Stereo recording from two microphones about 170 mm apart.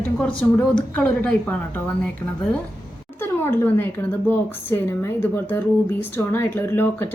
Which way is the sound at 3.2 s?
15° left (ahead or behind).